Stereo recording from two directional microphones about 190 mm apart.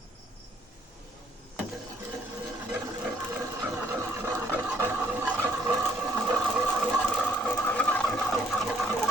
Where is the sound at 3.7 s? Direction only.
10° right (ahead or behind).